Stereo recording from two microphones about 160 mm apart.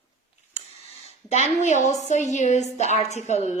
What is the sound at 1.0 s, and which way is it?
A woman's voice, 45° left (ahead or behind).